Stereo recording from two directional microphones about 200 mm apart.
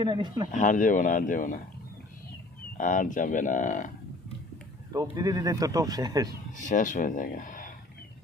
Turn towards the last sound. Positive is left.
turn(degrees=40)  # may be behind; listen again after turning